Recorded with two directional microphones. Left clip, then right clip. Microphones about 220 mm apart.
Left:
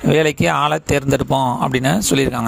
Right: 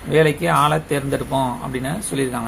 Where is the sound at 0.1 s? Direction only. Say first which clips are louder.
Left 1 dB; 50° left (ahead or behind).